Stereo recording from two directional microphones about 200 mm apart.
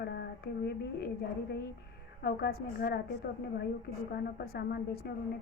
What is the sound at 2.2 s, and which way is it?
Speech, 50° left (ahead or behind).